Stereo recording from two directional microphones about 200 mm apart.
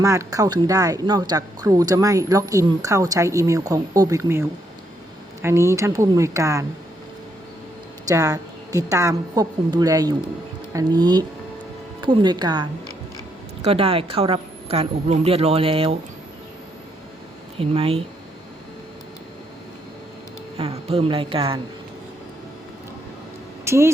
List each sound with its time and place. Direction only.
0.0 s speech: 15° right (ahead or behind)
8.0 s a woman's voice: 15° right (ahead or behind)
17.6 s speech: 30° right (ahead or behind)
20.6 s a woman's voice: 30° right (ahead or behind)
23.6 s speech: 15° right (ahead or behind)